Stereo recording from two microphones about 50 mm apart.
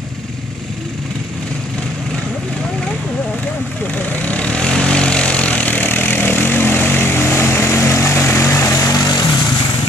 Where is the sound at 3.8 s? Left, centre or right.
Left.